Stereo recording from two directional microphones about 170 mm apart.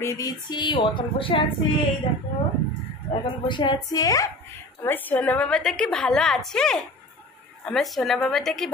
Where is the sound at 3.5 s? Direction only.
25° left (ahead or behind); by 8.7 s centre (ahead or behind).